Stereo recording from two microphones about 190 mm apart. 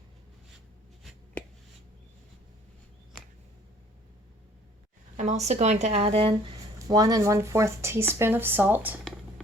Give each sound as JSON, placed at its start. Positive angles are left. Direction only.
{"t": 1.0, "sound": "finger snapping", "side_deg": 5}
{"t": 5.1, "sound": "speech", "side_deg": -35}
{"t": 6.7, "sound": "speech", "side_deg": -20}